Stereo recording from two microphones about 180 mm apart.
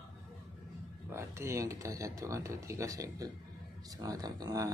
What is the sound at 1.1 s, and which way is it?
Speech, 15° right (ahead or behind).